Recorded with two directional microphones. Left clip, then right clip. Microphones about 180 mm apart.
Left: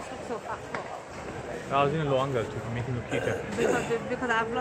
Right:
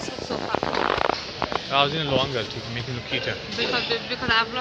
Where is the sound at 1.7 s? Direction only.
20° right (ahead or behind).